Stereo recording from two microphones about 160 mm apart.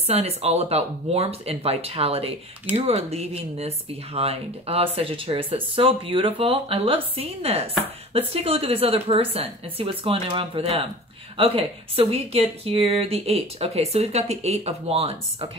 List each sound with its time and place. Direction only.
0.0 s speech: 40° right (ahead or behind)